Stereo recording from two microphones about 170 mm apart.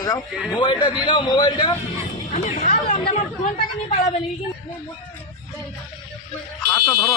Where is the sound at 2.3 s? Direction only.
45° left (ahead or behind).